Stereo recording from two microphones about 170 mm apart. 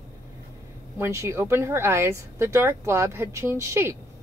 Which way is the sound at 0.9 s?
15° right (ahead or behind).